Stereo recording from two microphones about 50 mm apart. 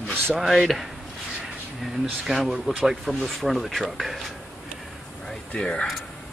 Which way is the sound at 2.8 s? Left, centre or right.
Centre.